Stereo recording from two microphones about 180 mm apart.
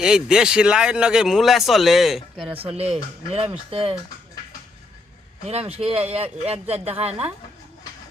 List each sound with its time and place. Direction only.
0.0 s speech: 5° right (ahead or behind)
3.2 s speech: 35° right (ahead or behind)
5.5 s speech: 35° right (ahead or behind)